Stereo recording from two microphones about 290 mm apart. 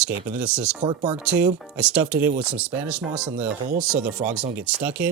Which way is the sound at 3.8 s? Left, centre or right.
Centre.